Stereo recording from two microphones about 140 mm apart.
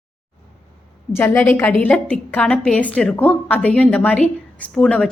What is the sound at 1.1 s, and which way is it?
A woman's voice, 15° left (ahead or behind).